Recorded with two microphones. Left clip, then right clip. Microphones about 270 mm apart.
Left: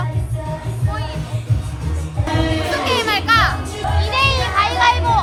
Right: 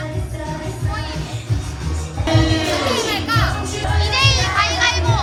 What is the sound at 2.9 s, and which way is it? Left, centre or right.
Music, centre.